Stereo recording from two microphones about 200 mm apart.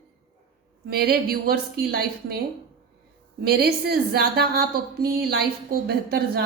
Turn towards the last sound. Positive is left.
turn(degrees=-50)  # may be behind; listen again after turning